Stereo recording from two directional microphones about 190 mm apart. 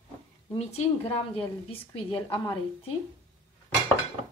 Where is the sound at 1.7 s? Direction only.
25° left (ahead or behind).